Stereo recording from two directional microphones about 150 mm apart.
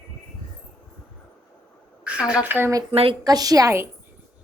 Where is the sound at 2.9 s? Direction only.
40° right (ahead or behind).